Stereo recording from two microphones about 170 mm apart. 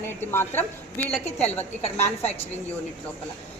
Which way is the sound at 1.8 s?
40° left (ahead or behind).